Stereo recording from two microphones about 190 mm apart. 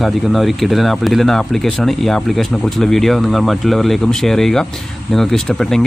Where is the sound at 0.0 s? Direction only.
Centre (ahead or behind).